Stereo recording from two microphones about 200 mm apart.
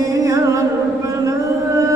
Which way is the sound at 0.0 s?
15° right (ahead or behind).